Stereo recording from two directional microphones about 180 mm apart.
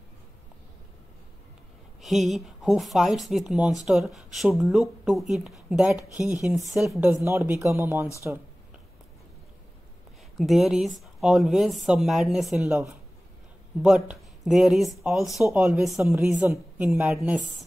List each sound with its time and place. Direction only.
2.0 s speech: centre (ahead or behind)
7.2 s a woman's voice: 15° right (ahead or behind)
10.3 s speech: centre (ahead or behind)
12.6 s a woman's voice: 15° right (ahead or behind)
13.8 s a woman's voice: centre (ahead or behind)